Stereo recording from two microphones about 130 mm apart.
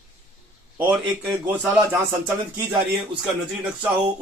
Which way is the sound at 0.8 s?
10° right (ahead or behind).